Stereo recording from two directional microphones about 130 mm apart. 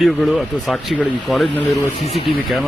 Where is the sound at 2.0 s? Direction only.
50° left (ahead or behind).